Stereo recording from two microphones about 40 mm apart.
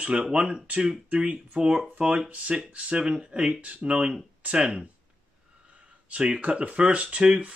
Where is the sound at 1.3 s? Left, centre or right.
Right.